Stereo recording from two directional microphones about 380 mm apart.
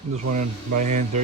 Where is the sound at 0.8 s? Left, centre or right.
Centre.